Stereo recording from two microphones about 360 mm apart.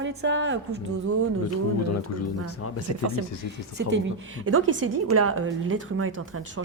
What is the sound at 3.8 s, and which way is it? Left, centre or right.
Speech, right.